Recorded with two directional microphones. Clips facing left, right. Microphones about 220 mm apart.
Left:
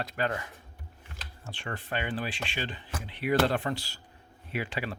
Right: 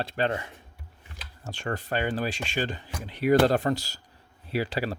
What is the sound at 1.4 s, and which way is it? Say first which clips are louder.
Speech: right 7 dB; 45° right (ahead or behind).